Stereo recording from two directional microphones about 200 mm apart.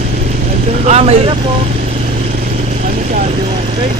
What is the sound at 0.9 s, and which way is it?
Speech, 30° right (ahead or behind).